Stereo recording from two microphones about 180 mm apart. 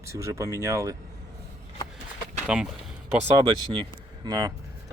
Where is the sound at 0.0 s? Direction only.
15° right (ahead or behind).